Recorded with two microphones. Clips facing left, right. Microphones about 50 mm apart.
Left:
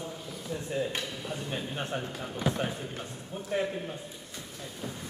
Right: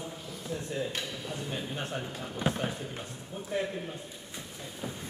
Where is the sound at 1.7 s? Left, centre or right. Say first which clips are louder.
Left 2 dB; centre.